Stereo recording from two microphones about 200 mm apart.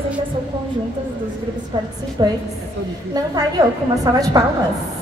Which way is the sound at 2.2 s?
20° right (ahead or behind).